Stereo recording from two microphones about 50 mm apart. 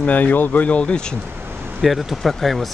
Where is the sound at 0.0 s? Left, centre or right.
Left.